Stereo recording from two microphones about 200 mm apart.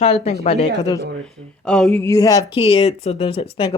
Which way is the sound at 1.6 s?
5° left (ahead or behind).